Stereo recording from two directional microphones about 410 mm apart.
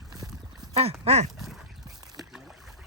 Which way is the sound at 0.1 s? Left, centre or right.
Centre.